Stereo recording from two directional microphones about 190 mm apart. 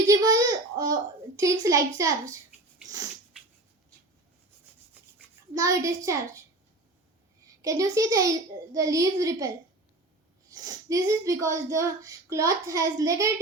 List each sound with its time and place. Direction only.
0.1 s a child's voice: 20° right (ahead or behind)
5.5 s speech: 15° right (ahead or behind)
7.6 s speech: 15° right (ahead or behind)
10.5 s speech: 20° right (ahead or behind)